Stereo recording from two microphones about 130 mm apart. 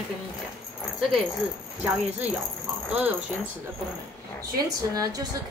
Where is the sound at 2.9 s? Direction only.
10° right (ahead or behind).